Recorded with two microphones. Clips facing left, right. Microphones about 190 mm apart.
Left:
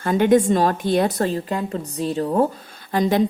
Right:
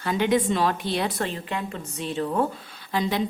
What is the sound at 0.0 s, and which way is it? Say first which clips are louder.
A woman's voice: left 6 dB; 50° left (ahead or behind).